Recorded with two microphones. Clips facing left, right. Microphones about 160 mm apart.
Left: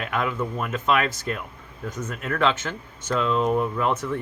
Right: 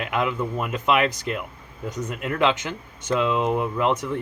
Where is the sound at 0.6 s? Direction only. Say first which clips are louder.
Right 2 dB; 15° right (ahead or behind).